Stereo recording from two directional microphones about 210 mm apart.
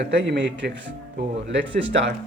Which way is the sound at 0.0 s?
60° right (ahead or behind).